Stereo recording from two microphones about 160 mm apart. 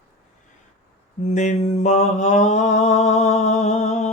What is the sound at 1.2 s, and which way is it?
Mantra, 45° left (ahead or behind).